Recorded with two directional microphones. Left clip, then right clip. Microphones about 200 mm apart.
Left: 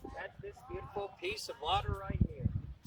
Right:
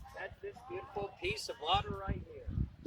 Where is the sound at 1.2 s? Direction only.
15° left (ahead or behind).